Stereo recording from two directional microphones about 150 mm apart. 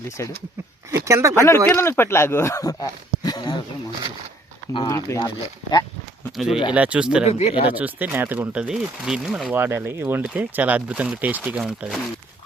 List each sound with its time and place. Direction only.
0.2 s speech: 20° left (ahead or behind)
1.0 s speech: 20° right (ahead or behind)
1.4 s speech: 20° left (ahead or behind)
4.9 s speech: 20° left (ahead or behind)
6.3 s speech: centre (ahead or behind)
7.3 s speech: 45° left (ahead or behind)
7.7 s speech: 10° right (ahead or behind)
11.6 s speech: centre (ahead or behind)